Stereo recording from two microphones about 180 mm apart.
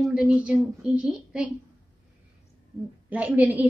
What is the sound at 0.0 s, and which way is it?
A woman's voice, 5° right (ahead or behind).